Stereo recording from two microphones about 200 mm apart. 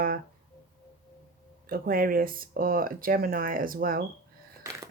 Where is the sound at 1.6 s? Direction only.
45° right (ahead or behind).